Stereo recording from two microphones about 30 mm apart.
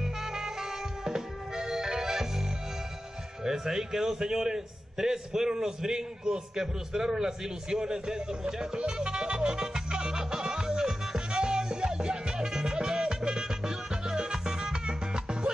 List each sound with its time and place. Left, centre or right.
0.0 s music: centre
3.4 s a man's voice: centre
8.7 s music: right